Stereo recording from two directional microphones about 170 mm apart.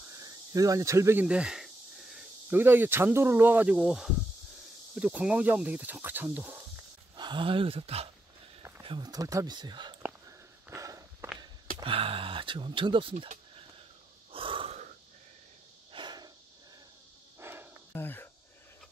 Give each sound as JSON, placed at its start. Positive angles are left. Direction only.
{"t": 0.2, "sound": "cricket", "side_deg": -20}
{"t": 2.5, "sound": "speech", "side_deg": -10}
{"t": 7.2, "sound": "speech", "side_deg": -30}
{"t": 10.7, "sound": "walk", "side_deg": -20}
{"t": 11.8, "sound": "speech", "side_deg": -30}
{"t": 14.3, "sound": "wheeze", "side_deg": -30}
{"t": 15.9, "sound": "a sound", "side_deg": -25}
{"t": 17.4, "sound": "a sound", "side_deg": -15}
{"t": 17.9, "sound": "speech", "side_deg": 10}